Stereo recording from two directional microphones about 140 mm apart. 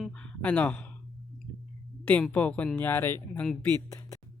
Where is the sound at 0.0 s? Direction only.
10° left (ahead or behind).